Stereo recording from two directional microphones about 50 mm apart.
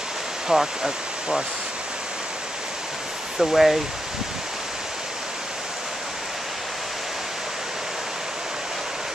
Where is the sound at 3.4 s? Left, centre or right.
Centre.